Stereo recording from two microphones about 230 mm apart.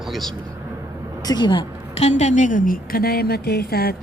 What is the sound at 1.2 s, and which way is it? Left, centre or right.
A woman's voice, centre.